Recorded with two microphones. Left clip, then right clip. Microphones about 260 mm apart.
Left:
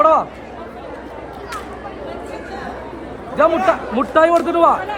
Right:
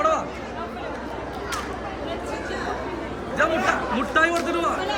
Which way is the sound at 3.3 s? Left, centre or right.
Left.